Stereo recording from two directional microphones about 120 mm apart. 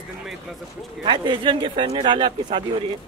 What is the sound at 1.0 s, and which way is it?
Speech, 45° right (ahead or behind).